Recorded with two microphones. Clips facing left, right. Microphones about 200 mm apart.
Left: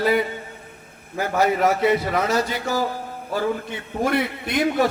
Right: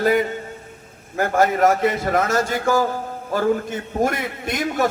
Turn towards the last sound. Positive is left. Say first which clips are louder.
# left 2 dB
turn(degrees=-45)  # may be behind; listen again after turning